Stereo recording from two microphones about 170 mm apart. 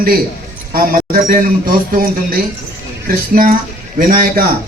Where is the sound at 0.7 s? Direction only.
60° right (ahead or behind).